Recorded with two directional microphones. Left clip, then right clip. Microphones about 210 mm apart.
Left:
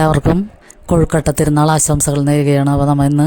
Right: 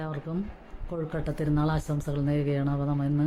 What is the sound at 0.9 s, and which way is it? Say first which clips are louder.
Speech: left 19 dB; 50° left (ahead or behind).